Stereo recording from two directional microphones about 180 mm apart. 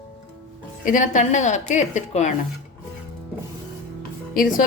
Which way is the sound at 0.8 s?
45° left (ahead or behind).